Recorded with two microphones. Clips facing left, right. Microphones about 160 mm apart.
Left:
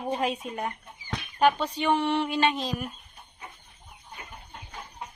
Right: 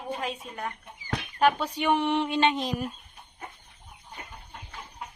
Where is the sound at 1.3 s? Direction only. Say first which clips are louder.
Left 1 dB; 5° right (ahead or behind).